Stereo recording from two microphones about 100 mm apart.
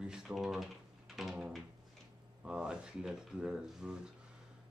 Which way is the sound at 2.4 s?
10° right (ahead or behind).